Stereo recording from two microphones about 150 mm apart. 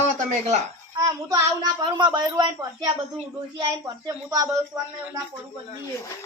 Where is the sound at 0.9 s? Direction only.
25° right (ahead or behind).